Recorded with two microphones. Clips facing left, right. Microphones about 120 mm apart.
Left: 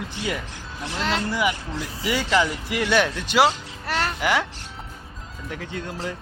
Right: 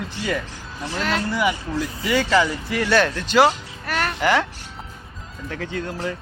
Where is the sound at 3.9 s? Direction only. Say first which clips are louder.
Right 1 dB; 25° left (ahead or behind).